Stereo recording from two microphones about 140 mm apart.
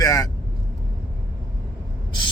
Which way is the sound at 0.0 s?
25° left (ahead or behind).